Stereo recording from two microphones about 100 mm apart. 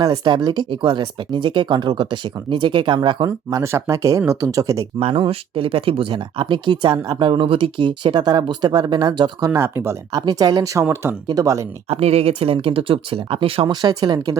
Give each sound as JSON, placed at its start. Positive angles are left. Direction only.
{"t": 0.0, "sound": "speech", "side_deg": -45}
{"t": 3.5, "sound": "speech", "side_deg": -30}
{"t": 4.9, "sound": "speech", "side_deg": -70}
{"t": 10.1, "sound": "speech", "side_deg": -40}
{"t": 11.9, "sound": "speech", "side_deg": -90}
{"t": 13.7, "sound": "speech", "side_deg": -45}